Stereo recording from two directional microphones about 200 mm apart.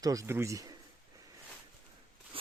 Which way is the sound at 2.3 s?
25° right (ahead or behind).